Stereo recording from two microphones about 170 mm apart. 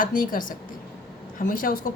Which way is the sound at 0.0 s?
55° left (ahead or behind).